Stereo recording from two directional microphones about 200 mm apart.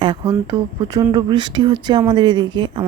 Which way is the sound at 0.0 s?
25° right (ahead or behind).